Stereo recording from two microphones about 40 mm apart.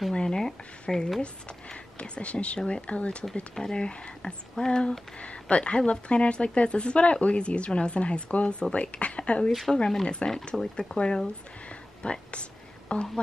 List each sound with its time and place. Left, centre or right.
0.1 s a sound: left
1.2 s speech: left
5.2 s speech: left
10.5 s speech: centre
11.7 s whispering: left